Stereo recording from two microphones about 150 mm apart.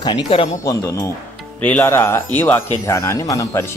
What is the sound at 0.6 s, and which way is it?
Speech, 20° left (ahead or behind).